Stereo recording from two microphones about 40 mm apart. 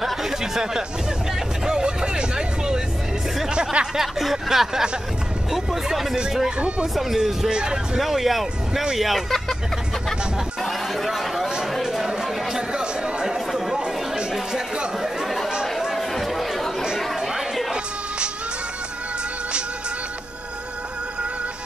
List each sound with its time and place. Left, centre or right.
0.0 s a sound: centre
1.7 s vehicle: centre
3.4 s music: right
3.9 s a sound: centre
5.5 s speech: centre
7.2 s speech: centre
8.0 s speech: centre
10.6 s chatter: centre
11.8 s a sound: centre
12.1 s chatter: centre
13.5 s chatter: centre
15.0 s chatter: centre
17.2 s chatter: centre